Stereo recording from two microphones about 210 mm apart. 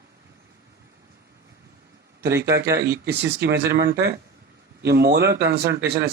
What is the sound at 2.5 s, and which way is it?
Speech, 50° right (ahead or behind).